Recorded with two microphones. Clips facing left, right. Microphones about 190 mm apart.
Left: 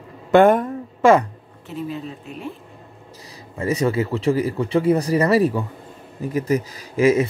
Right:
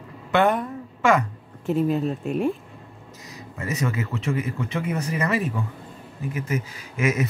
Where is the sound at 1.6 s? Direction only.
50° right (ahead or behind).